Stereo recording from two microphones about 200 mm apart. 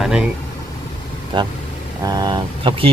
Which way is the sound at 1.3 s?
25° right (ahead or behind).